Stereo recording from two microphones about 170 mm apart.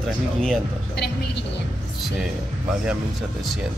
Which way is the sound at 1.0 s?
90° left.